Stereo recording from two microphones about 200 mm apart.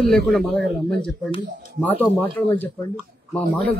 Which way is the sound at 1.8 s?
10° left (ahead or behind).